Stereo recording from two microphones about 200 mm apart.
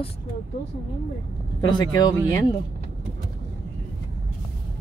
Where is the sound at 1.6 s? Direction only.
20° left (ahead or behind).